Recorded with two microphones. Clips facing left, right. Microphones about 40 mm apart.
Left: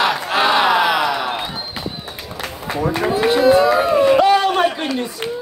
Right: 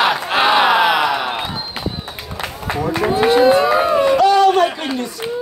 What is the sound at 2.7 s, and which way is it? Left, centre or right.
Run, right.